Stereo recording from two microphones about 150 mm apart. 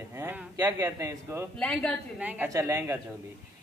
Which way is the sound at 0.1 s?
15° right (ahead or behind).